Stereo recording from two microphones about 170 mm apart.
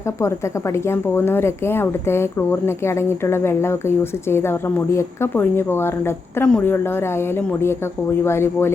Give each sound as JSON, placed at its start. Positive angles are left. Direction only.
{"t": 0.2, "sound": "a woman's voice", "side_deg": 15}